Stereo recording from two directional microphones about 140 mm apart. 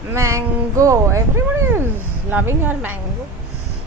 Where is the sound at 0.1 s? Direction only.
20° right (ahead or behind).